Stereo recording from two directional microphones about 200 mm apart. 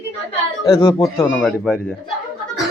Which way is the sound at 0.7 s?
25° left (ahead or behind).